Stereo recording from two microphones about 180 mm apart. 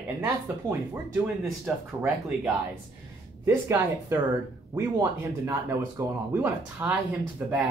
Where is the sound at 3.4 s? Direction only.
15° right (ahead or behind).